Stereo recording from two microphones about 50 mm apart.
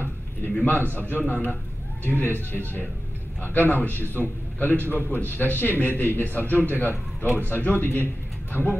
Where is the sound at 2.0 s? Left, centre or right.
Left.